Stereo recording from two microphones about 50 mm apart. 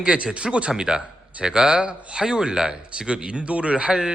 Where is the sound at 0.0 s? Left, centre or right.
Centre.